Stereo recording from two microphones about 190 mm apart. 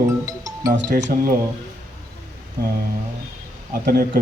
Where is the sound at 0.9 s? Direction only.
50° right (ahead or behind).